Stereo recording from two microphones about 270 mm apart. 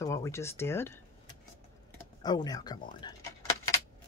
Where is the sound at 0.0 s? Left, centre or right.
Centre.